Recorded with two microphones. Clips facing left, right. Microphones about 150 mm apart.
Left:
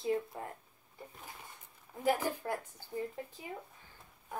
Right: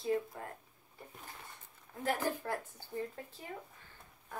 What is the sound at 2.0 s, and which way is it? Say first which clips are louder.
Speech: left 3 dB; 10° left (ahead or behind).